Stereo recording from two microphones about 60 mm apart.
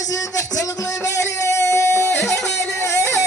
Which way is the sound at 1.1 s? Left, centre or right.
Left.